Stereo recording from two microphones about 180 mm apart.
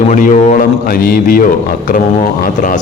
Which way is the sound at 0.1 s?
45° left (ahead or behind).